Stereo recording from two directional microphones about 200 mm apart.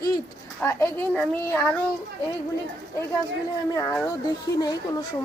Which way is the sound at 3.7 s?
15° left (ahead or behind).